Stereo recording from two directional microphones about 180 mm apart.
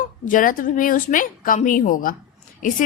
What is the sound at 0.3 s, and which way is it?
A woman's voice, 50° left (ahead or behind).